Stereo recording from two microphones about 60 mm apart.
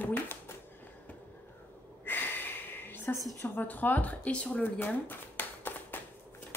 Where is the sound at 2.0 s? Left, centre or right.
Left.